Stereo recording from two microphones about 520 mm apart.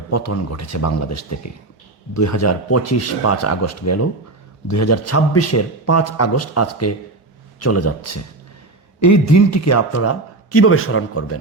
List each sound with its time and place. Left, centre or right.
0.1 s a man's voice: left